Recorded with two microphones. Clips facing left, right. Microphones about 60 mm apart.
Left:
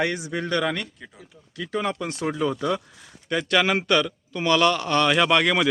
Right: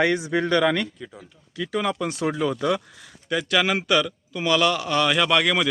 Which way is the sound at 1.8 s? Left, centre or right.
Centre.